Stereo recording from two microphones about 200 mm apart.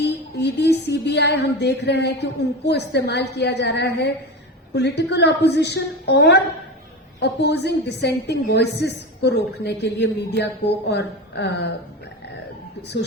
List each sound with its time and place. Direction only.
0.0 s music: 55° left (ahead or behind)
2.6 s a woman's voice: 55° left (ahead or behind)